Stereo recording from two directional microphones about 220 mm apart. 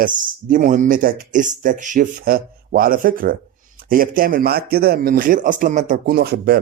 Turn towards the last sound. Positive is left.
turn(degrees=-45)  # may be behind; listen again after turning